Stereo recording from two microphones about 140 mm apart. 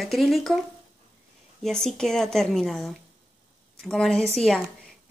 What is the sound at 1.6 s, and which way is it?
A woman's voice, 5° left (ahead or behind).